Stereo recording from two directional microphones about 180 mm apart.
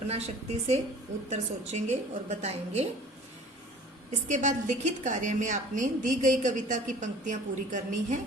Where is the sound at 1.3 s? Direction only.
40° right (ahead or behind).